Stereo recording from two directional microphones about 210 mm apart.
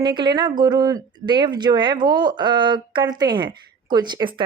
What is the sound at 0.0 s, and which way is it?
Speech, 20° right (ahead or behind).